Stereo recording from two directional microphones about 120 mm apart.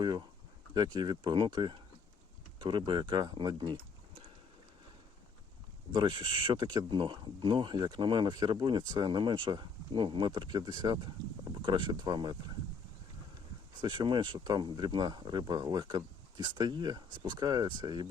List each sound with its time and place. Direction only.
0.0 s speech: 35° right (ahead or behind)
5.9 s speech: 40° right (ahead or behind)
13.8 s speech: 40° right (ahead or behind)